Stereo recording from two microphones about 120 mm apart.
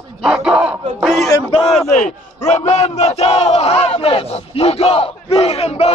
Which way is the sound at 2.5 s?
70° left (ahead or behind).